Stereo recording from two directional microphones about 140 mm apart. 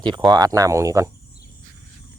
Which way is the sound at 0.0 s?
30° right (ahead or behind).